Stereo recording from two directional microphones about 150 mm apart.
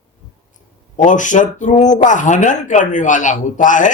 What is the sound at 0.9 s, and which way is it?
Speech, 55° left (ahead or behind).